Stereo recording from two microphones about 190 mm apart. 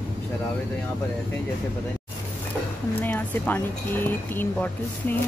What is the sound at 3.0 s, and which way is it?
Speech, 10° left (ahead or behind).